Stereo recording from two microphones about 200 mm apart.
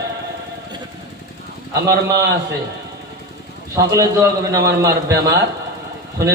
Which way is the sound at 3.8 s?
15° right (ahead or behind).